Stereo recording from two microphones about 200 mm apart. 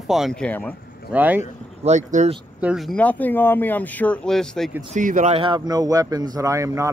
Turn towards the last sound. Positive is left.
turn(degrees=-15)  # may be behind; listen again after turning